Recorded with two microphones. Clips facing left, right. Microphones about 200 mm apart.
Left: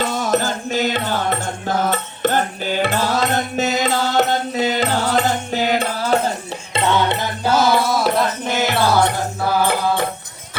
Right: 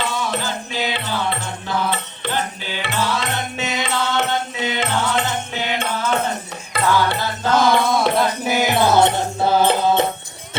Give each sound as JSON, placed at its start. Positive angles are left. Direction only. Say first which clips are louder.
{"t": 0.0, "sound": "music", "louder": "left 5 dB", "side_deg": 40}
{"t": 6.7, "sound": "music", "louder": "left 1 dB", "side_deg": 25}
{"t": 7.4, "sound": "music", "louder": "even", "side_deg": 5}
{"t": 8.5, "sound": "music", "louder": "right 1 dB", "side_deg": -15}